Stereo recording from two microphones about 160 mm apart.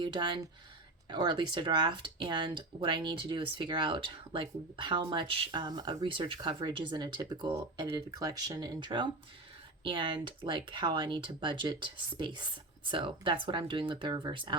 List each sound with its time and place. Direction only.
0.0 s speech: 30° right (ahead or behind)